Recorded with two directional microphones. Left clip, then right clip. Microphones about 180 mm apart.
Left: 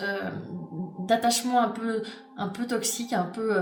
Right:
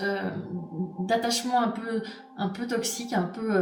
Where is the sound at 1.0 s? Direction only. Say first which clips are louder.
Left 2 dB; 50° left (ahead or behind).